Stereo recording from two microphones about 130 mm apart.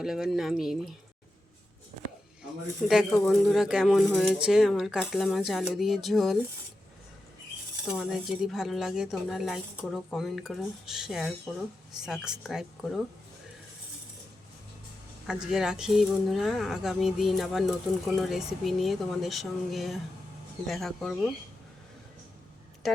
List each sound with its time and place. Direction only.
0.0 s speech: 5° right (ahead or behind)
2.8 s speech: 5° right (ahead or behind)
7.9 s speech: 5° right (ahead or behind)
15.3 s speech: 5° right (ahead or behind)